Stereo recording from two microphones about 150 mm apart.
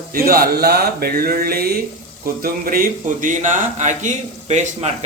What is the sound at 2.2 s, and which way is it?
Speech, 70° right (ahead or behind).